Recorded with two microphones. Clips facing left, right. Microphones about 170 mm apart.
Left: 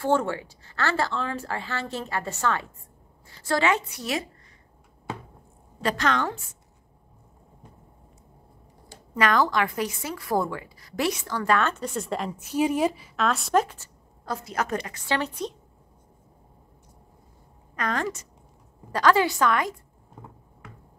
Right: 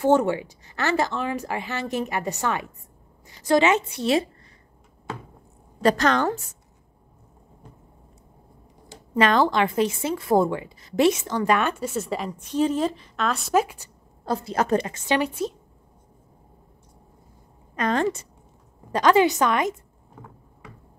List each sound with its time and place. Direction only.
0.0 s a woman's voice: 20° right (ahead or behind)
5.8 s a woman's voice: 40° right (ahead or behind)
8.8 s a woman's voice: 25° right (ahead or behind); by 13.8 s 10° right (ahead or behind)
14.2 s a woman's voice: 30° right (ahead or behind); by 15.5 s 10° right (ahead or behind)
17.7 s a woman's voice: 25° right (ahead or behind)